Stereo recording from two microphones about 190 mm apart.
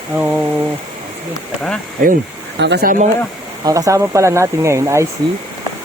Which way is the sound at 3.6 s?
15° right (ahead or behind).